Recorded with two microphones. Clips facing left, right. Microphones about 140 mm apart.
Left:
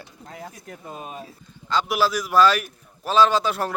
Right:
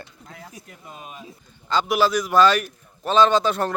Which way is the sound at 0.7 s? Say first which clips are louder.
Left 7 dB; 40° left (ahead or behind).